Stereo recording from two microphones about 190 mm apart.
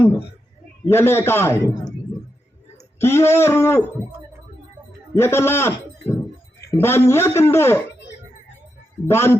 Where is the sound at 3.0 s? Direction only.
15° left (ahead or behind).